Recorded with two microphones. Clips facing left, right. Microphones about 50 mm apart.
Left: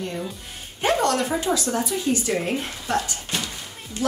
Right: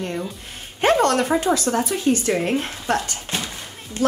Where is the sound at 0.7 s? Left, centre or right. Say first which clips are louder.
Right 4 dB; right.